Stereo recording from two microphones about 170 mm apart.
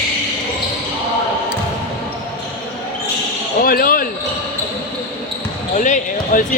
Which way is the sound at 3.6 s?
60° left (ahead or behind).